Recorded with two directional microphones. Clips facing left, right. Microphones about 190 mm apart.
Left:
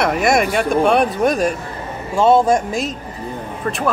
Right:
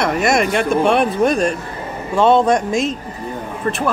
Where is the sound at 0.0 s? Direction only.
Centre (ahead or behind).